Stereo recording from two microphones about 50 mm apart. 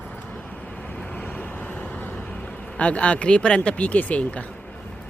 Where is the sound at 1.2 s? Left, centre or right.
Left.